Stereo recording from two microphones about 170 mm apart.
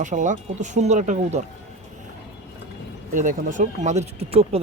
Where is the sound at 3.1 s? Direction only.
50° right (ahead or behind).